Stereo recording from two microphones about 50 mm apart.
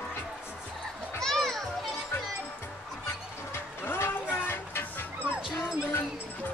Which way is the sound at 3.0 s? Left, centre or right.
Left.